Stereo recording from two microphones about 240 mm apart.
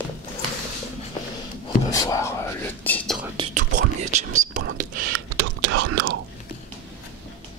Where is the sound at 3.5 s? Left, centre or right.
Right.